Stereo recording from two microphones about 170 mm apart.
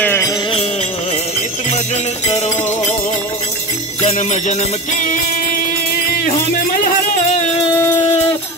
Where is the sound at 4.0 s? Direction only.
40° left (ahead or behind).